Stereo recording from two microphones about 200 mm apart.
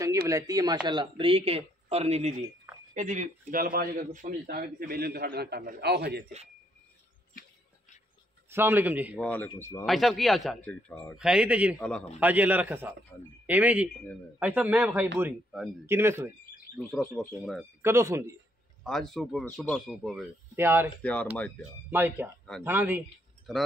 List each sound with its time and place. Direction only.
0.3 s a man's voice: 15° right (ahead or behind); by 6.2 s 55° right (ahead or behind)
8.5 s a man's voice: 10° right (ahead or behind)
9.2 s speech: 10° left (ahead or behind)
9.8 s speech: centre (ahead or behind)
11.1 s a man's voice: 5° right (ahead or behind)
16.9 s speech: 5° left (ahead or behind)
17.8 s a man's voice: 15° right (ahead or behind)
18.9 s speech: centre (ahead or behind)
20.5 s a man's voice: 10° right (ahead or behind)
21.0 s speech: 5° left (ahead or behind)
21.9 s a man's voice: 10° right (ahead or behind)